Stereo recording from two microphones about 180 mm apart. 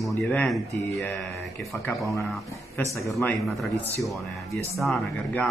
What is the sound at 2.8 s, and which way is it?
Speech, 15° left (ahead or behind).